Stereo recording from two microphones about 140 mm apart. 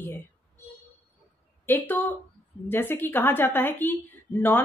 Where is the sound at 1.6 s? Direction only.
15° left (ahead or behind).